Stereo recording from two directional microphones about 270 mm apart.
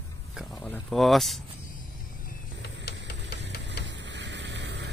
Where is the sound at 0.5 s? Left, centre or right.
Centre.